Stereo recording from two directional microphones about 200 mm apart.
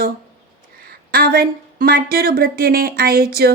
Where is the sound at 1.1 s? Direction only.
45° right (ahead or behind).